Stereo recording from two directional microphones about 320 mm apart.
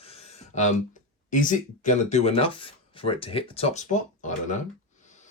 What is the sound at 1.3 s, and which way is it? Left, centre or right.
Speech, left.